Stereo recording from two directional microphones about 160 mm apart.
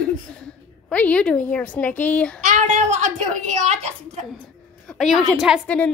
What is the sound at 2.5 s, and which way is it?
A woman's voice, 50° right (ahead or behind).